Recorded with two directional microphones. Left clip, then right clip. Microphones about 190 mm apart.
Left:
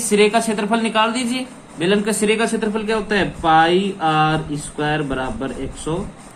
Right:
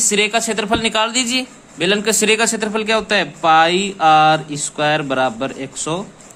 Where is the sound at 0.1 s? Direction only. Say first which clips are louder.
Left 4 dB; 40° right (ahead or behind).